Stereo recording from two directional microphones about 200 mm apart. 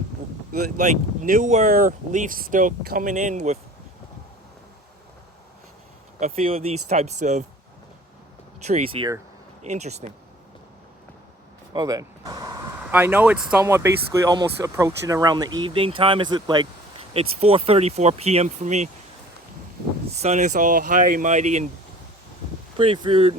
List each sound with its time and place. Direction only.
0.5 s speech: 40° right (ahead or behind)
6.1 s speech: 35° right (ahead or behind)
8.6 s speech: 30° right (ahead or behind)
11.7 s a sound: 20° right (ahead or behind)
12.8 s speech: 10° right (ahead or behind); by 18.9 s 35° right (ahead or behind)
20.1 s speech: 35° right (ahead or behind)
22.8 s speech: 25° right (ahead or behind)